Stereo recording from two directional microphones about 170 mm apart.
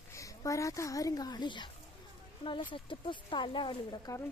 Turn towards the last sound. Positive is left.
turn(degrees=25)  # may be behind; listen again after turning